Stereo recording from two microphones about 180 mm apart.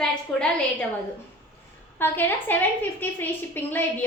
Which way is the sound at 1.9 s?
10° left (ahead or behind).